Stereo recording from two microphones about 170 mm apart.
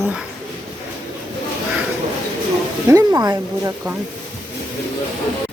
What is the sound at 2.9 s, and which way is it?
A woman's voice, 20° right (ahead or behind).